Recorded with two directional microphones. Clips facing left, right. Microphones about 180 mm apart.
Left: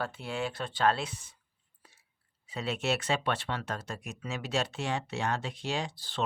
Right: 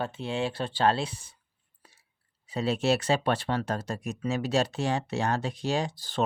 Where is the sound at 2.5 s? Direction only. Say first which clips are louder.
Right 6 dB; 35° right (ahead or behind).